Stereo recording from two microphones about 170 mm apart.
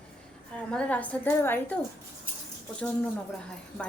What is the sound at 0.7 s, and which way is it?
Speech, 10° left (ahead or behind).